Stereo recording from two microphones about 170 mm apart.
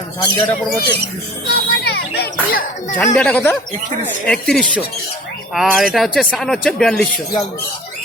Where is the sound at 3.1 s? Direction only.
5° left (ahead or behind).